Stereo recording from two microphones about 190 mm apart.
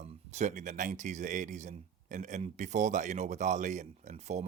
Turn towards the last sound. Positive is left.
turn(degrees=-35)  # may be behind; listen again after turning